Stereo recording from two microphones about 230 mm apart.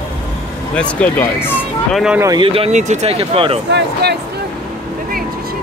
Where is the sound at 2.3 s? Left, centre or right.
Right.